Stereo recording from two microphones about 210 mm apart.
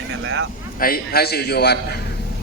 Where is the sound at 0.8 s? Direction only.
45° left (ahead or behind).